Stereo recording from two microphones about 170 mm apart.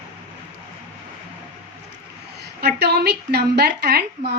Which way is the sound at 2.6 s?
70° right (ahead or behind).